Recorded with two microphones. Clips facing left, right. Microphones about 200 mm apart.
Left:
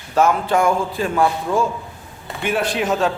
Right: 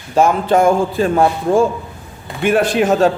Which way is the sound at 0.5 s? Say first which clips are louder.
Right 5 dB; 40° right (ahead or behind).